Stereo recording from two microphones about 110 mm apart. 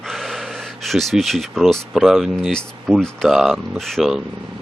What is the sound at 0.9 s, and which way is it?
Speech, centre (ahead or behind).